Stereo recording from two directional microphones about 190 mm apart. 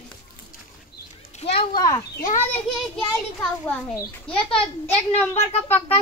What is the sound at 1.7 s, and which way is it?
A child's voice, 20° left (ahead or behind).